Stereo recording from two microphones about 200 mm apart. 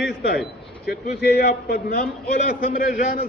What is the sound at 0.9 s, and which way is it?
A man's voice, 50° left (ahead or behind).